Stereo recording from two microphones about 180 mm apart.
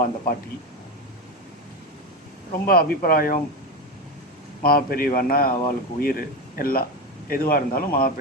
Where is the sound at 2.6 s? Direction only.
55° left (ahead or behind).